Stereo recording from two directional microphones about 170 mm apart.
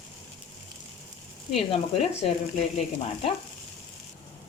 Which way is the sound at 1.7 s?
35° left (ahead or behind).